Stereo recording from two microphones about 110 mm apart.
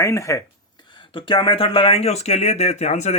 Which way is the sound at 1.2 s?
50° left (ahead or behind).